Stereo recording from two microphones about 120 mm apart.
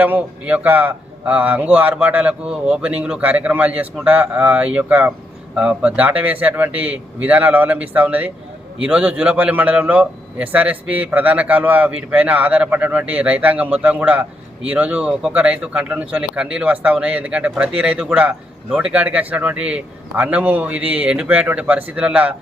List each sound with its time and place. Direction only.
0.0 s a man's voice: 15° right (ahead or behind)